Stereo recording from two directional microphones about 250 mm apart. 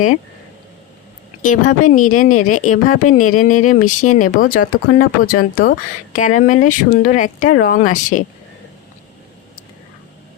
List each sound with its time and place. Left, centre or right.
1.4 s speech: left